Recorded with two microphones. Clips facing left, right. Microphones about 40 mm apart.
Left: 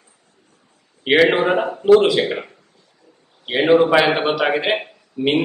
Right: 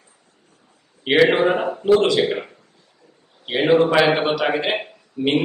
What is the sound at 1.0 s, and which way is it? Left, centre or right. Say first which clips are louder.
A man's voice: left 1 dB; centre.